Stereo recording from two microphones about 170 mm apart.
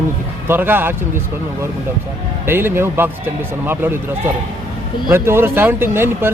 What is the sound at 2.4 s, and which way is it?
A man's voice, 15° right (ahead or behind).